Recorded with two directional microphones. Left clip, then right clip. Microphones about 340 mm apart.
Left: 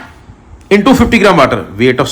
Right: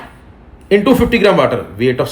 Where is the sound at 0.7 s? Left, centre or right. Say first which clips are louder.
Left 3 dB; left.